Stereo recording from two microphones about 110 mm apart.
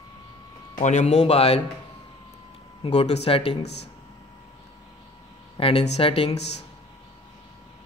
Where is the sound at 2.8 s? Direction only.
70° left (ahead or behind).